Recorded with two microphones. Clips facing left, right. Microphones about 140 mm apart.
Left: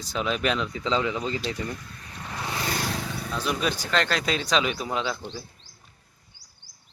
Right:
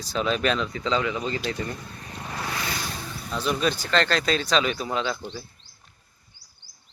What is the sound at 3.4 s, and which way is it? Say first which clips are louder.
Speech: right 3 dB; 10° left (ahead or behind).